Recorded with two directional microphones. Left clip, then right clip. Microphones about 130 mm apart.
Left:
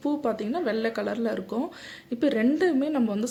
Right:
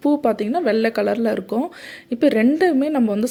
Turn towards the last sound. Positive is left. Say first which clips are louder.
# right 7 dB
turn(degrees=-45)  # may be behind; listen again after turning